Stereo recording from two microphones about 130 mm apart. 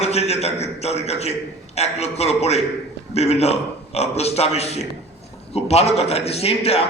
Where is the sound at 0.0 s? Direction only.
55° left (ahead or behind).